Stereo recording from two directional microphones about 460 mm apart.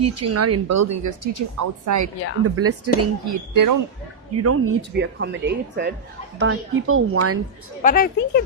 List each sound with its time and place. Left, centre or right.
0.0 s speech: right
4.4 s speech: right
7.8 s a woman's voice: centre